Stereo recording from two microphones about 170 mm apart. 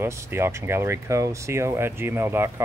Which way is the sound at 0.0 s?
15° right (ahead or behind).